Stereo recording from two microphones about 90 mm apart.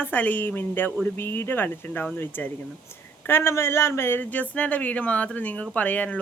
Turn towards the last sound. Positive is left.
turn(degrees=15)  # may be behind; listen again after turning